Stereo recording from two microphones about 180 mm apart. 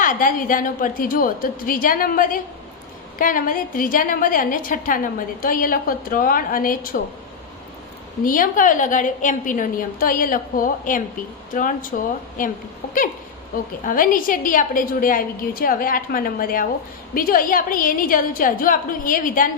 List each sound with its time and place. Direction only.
0.0 s a woman's voice: 50° left (ahead or behind)
8.2 s a woman's voice: 50° left (ahead or behind)